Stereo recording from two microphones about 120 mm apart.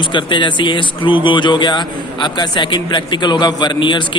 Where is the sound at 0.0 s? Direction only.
40° left (ahead or behind).